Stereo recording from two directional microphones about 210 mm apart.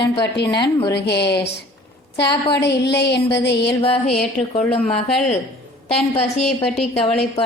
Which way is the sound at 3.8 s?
30° left (ahead or behind).